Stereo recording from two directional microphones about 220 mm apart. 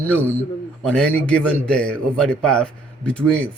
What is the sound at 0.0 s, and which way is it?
A man's voice, 5° left (ahead or behind).